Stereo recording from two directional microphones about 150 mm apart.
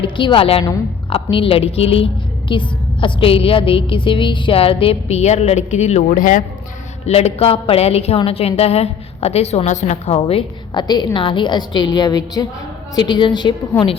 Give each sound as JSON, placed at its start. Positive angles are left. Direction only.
{"t": 0.0, "sound": "a woman's voice", "side_deg": 35}
{"t": 7.0, "sound": "a woman's voice", "side_deg": 45}
{"t": 10.2, "sound": "a woman's voice", "side_deg": 35}